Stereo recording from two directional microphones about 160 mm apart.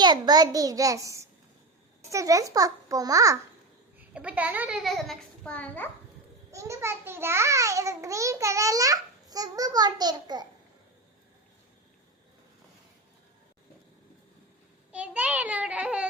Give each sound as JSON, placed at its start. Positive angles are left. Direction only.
{"t": 0.0, "sound": "a child's voice", "side_deg": -25}
{"t": 3.9, "sound": "a child's voice", "side_deg": -5}
{"t": 6.5, "sound": "a child's voice", "side_deg": -20}
{"t": 14.9, "sound": "a child's voice", "side_deg": -10}